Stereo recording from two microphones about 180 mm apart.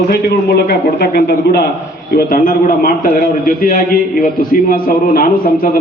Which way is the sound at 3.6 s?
50° left (ahead or behind).